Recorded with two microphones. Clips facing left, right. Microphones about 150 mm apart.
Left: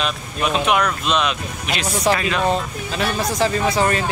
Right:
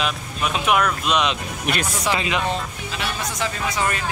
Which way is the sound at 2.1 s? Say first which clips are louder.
Left 5 dB; 35° left (ahead or behind).